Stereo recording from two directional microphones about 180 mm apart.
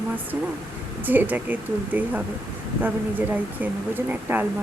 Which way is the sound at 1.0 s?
10° right (ahead or behind).